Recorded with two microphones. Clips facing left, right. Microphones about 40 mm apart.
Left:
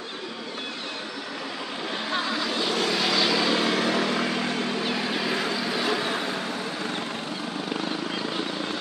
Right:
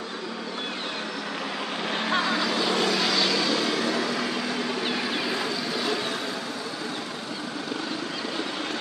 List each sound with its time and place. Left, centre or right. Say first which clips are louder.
2.0 s vehicle: right 3 dB; right
2.8 s vehicle: even; centre
3.5 s vehicle: left 2 dB; left
5.2 s vehicle: left 1 dB; centre